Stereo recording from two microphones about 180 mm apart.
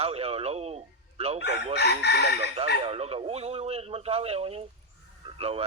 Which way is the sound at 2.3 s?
35° right (ahead or behind).